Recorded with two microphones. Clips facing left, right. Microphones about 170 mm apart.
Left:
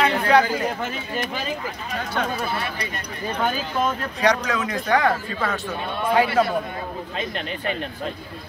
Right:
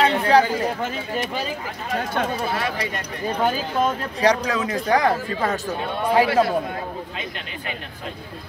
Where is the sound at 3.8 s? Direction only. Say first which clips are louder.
Right 1 dB; 30° right (ahead or behind).